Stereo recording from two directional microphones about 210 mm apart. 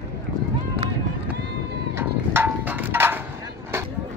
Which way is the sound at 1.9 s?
10° right (ahead or behind).